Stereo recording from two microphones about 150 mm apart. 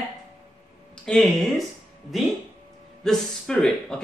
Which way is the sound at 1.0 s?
Centre (ahead or behind).